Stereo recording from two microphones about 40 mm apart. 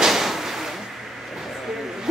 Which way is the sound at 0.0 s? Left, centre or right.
Centre.